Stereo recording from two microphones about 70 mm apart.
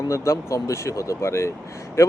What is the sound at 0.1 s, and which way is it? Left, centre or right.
Speech, left.